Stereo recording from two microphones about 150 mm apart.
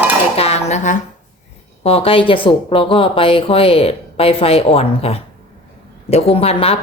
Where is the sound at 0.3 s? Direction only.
45° left (ahead or behind).